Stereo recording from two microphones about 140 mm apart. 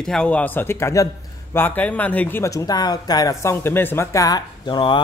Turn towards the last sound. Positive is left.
turn(degrees=30)  # may be behind; listen again after turning